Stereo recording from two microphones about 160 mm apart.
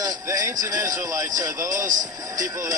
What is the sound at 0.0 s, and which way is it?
A man's voice, 20° right (ahead or behind).